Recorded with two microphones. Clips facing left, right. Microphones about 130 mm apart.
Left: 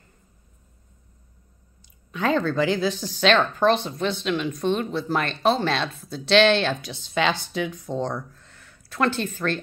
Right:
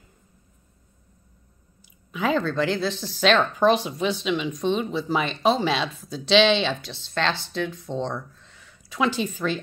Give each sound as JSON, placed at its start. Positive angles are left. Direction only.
{"t": 1.8, "sound": "speech", "side_deg": -5}